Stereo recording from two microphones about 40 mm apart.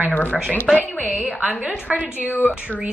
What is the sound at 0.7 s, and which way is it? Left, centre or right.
A woman's voice, right.